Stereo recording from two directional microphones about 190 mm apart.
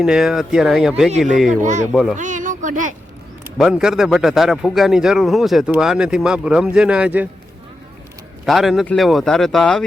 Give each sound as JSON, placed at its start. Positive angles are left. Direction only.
{"t": 0.0, "sound": "a man's voice", "side_deg": -5}
{"t": 1.6, "sound": "speech", "side_deg": -40}
{"t": 1.9, "sound": "a man's voice", "side_deg": 0}
{"t": 2.1, "sound": "speech", "side_deg": -40}
{"t": 3.6, "sound": "a man's voice", "side_deg": 0}
{"t": 8.4, "sound": "a man's voice", "side_deg": 0}